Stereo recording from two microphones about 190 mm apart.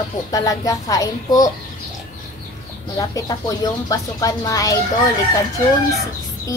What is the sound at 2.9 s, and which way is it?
Speech, 20° left (ahead or behind).